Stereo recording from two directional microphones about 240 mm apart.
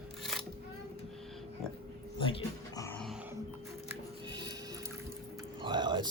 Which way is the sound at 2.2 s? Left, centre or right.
Centre.